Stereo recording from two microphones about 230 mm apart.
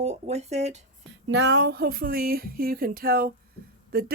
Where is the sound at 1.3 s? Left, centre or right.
Right.